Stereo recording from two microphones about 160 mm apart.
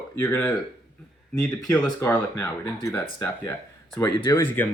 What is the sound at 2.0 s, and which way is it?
Speech, 15° left (ahead or behind).